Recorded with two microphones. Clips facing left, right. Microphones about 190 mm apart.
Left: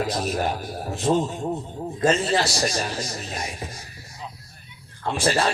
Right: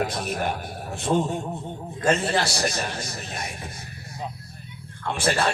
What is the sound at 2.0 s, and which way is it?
Speech, 60° right (ahead or behind).